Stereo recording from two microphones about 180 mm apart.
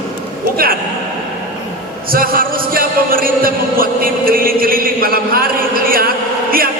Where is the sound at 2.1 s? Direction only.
55° right (ahead or behind).